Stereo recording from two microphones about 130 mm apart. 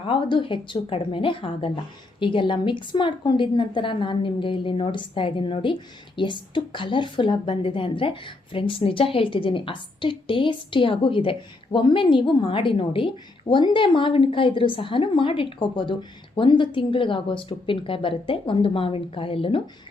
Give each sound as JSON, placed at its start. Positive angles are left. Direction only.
{"t": 0.0, "sound": "a woman's voice", "side_deg": 40}